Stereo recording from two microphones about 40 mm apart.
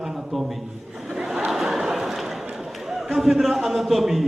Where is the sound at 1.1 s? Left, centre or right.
Centre.